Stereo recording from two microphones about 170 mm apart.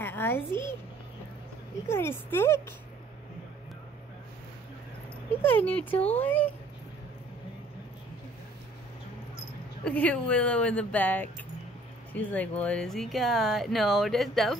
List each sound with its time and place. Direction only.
0.0 s a child's voice: 10° left (ahead or behind)
1.9 s a woman's voice: 15° left (ahead or behind)
5.4 s a woman's voice: 10° left (ahead or behind)
9.8 s a woman's voice: 5° left (ahead or behind)